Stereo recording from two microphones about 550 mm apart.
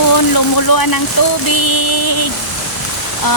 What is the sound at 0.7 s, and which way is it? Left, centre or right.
Speech, left.